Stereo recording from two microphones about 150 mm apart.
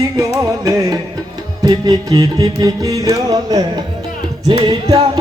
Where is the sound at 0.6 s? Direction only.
25° right (ahead or behind).